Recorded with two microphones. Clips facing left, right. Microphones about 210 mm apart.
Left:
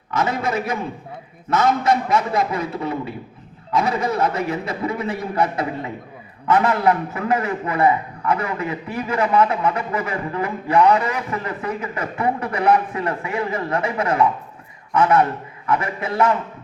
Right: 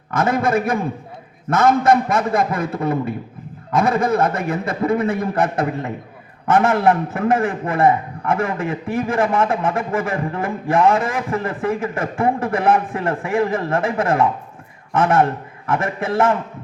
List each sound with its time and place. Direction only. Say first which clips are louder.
0.1 s a man's voice: right 4 dB; 50° right (ahead or behind)